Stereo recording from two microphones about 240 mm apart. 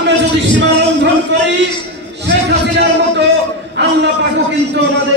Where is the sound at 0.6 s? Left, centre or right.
Right.